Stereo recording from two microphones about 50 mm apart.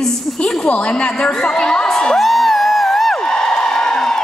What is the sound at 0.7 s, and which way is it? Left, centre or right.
A woman's voice, left.